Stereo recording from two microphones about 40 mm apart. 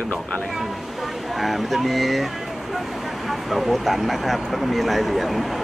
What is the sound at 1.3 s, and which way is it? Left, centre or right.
Speech, centre.